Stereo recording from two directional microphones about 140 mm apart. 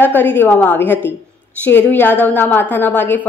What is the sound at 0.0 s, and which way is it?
Speech, 15° left (ahead or behind).